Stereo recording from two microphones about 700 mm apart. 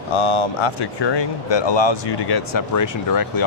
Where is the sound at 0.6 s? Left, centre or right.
Left.